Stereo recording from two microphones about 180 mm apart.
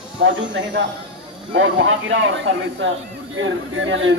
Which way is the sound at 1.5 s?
90° right.